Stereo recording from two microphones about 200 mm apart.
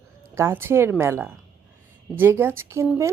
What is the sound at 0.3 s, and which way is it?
A woman's voice, 10° right (ahead or behind).